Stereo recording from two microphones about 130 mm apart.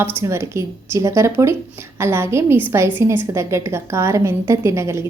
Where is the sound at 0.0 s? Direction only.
20° right (ahead or behind).